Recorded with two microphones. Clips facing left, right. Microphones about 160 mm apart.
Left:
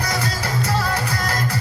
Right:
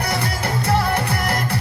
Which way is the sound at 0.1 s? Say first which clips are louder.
Right 1 dB; 60° right (ahead or behind).